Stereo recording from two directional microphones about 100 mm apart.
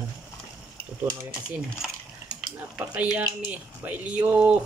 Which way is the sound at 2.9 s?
15° right (ahead or behind).